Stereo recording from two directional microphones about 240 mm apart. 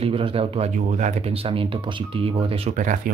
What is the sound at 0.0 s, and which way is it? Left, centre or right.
Speech, right.